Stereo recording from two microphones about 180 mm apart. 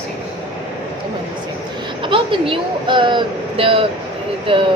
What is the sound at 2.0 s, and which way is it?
Speech, 30° right (ahead or behind).